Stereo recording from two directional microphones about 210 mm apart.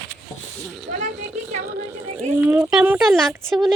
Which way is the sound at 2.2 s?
15° right (ahead or behind).